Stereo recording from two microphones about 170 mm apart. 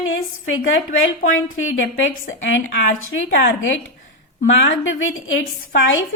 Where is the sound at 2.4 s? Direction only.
90° left.